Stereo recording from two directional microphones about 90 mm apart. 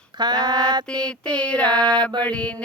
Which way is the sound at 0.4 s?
50° right (ahead or behind).